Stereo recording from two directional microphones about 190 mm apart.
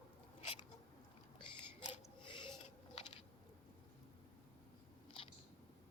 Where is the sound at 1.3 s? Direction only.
30° left (ahead or behind).